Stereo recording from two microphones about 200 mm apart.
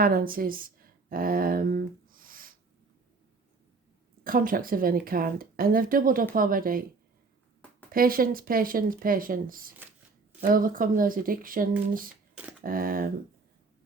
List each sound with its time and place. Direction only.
0.0 s speech: 45° right (ahead or behind)
4.2 s speech: 45° right (ahead or behind)
7.9 s speech: 45° right (ahead or behind)
12.3 s speech: 5° right (ahead or behind)
12.6 s speech: 45° right (ahead or behind)